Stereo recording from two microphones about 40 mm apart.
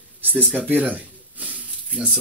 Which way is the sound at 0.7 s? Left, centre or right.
Right.